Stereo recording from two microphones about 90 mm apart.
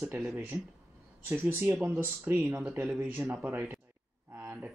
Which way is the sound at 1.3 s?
25° right (ahead or behind).